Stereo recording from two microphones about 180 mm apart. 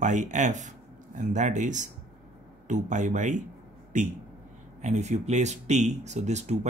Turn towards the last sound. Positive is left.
turn(degrees=-40)  # may be behind; listen again after turning